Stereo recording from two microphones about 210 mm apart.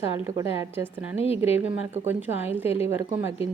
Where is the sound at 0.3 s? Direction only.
15° right (ahead or behind).